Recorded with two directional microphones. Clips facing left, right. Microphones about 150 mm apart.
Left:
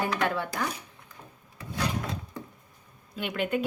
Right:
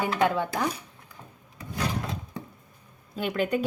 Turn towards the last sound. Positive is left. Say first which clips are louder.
# right 2 dB
turn(degrees=-40)  # may be behind; listen again after turning